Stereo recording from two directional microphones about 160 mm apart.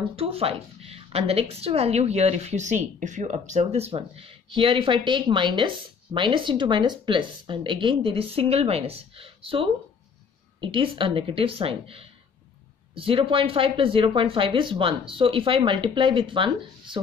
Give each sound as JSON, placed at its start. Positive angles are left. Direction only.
{"t": 0.1, "sound": "a woman's voice", "side_deg": -35}